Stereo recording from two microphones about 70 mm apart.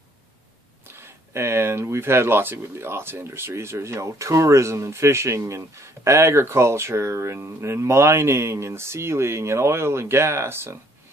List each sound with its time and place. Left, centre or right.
0.8 s speech: right